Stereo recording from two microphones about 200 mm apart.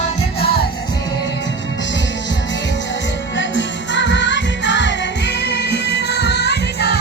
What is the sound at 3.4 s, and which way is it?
Music, 65° left (ahead or behind).